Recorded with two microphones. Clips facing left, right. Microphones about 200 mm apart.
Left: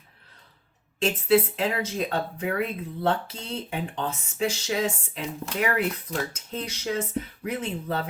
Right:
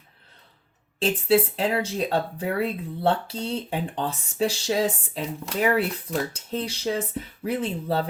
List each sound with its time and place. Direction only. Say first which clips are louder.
0.9 s speech: even; 30° right (ahead or behind)